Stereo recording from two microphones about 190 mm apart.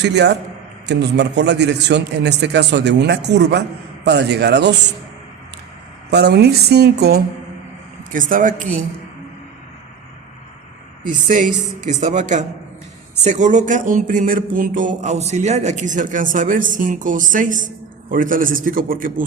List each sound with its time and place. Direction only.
0.0 s a man's voice: 65° right (ahead or behind)
6.1 s a man's voice: 60° right (ahead or behind)
8.1 s speech: 45° right (ahead or behind)
11.1 s a woman's voice: 45° right (ahead or behind)